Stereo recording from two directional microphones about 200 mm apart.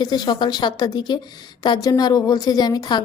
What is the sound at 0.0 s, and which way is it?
Speech, 20° left (ahead or behind).